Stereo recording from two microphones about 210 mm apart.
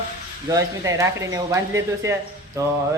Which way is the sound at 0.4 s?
15° right (ahead or behind).